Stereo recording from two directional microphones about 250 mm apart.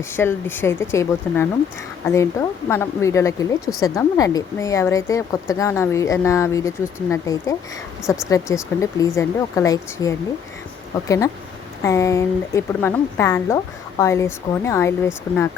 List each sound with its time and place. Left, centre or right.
0.2 s a woman's voice: centre
11.8 s a woman's voice: centre